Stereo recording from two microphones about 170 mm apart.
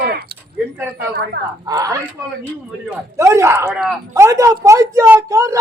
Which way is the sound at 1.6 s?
20° right (ahead or behind).